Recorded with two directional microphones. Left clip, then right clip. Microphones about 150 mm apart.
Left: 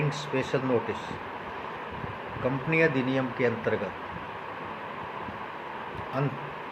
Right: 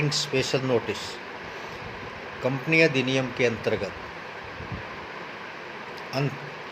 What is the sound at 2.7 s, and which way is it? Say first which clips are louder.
Speech: right 4 dB; 55° right (ahead or behind).